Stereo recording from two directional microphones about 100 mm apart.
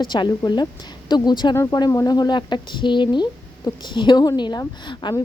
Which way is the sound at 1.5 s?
40° left (ahead or behind).